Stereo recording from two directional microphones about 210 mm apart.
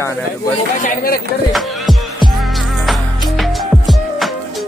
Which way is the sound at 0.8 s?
45° left (ahead or behind).